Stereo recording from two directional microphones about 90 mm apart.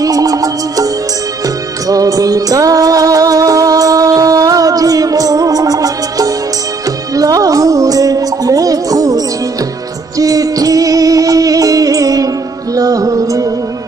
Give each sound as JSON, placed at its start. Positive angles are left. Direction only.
{"t": 0.0, "sound": "music", "side_deg": -40}
{"t": 1.9, "sound": "music", "side_deg": -40}